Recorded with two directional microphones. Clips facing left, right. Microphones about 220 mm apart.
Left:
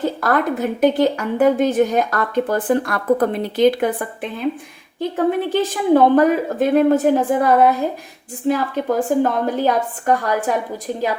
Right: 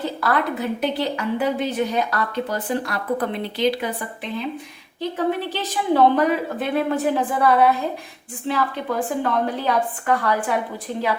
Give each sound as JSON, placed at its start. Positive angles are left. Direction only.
{"t": 0.0, "sound": "a woman's voice", "side_deg": 45}